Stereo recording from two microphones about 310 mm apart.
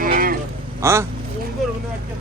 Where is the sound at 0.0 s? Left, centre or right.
Right.